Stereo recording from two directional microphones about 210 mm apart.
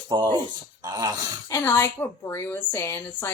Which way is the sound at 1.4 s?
15° left (ahead or behind).